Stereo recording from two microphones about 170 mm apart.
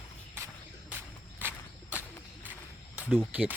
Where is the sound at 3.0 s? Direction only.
10° right (ahead or behind).